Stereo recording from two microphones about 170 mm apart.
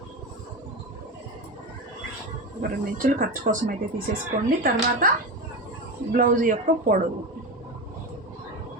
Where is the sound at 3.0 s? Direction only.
55° right (ahead or behind).